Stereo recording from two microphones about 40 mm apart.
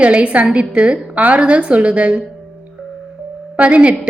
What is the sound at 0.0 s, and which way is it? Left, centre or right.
A woman's voice, right.